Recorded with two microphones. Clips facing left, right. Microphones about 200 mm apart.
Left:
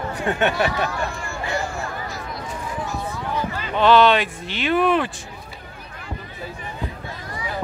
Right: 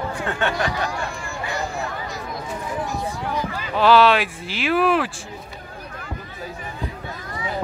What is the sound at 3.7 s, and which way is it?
Speech, 5° right (ahead or behind).